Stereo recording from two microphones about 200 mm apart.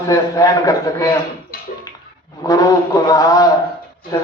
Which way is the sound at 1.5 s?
45° left (ahead or behind).